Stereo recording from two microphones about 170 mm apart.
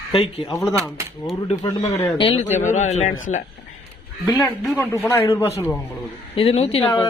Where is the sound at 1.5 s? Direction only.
40° left (ahead or behind).